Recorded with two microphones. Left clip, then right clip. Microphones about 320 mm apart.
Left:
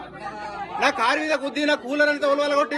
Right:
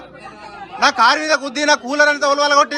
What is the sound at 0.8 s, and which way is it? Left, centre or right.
A man's voice, centre.